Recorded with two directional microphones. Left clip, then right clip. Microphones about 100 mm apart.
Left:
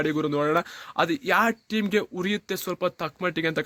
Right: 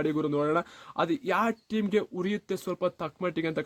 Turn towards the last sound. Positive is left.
turn(degrees=20)  # may be behind; listen again after turning